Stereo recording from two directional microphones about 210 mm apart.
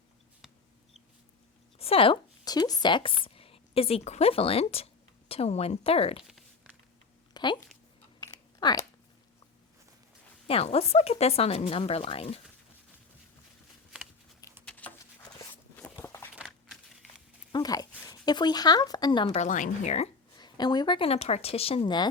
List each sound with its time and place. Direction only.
1.8 s speech: 25° left (ahead or behind)
6.2 s a sound: centre (ahead or behind)
7.3 s speech: 20° left (ahead or behind)
8.2 s chewing: 15° left (ahead or behind)
10.4 s speech: 30° left (ahead or behind)
14.6 s a sound: 5° left (ahead or behind)
15.2 s walk: 10° left (ahead or behind)
16.3 s a sound: centre (ahead or behind)
17.5 s speech: 20° left (ahead or behind)
20.3 s speech: 20° left (ahead or behind)